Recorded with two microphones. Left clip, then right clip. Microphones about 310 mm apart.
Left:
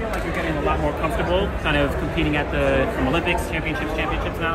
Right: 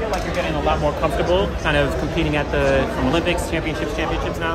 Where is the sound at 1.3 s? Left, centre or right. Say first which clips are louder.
Right 2 dB; right.